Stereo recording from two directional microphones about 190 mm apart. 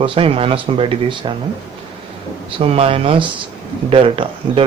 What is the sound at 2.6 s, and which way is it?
Speech, 30° right (ahead or behind).